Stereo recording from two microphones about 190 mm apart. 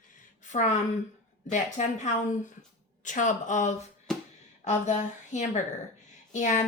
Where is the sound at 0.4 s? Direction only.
40° left (ahead or behind).